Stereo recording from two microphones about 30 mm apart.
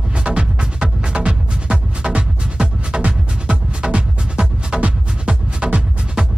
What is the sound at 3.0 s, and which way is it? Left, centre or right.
Music, right.